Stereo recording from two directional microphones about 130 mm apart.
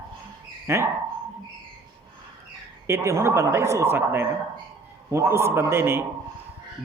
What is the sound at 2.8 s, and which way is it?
A man's voice, 20° right (ahead or behind).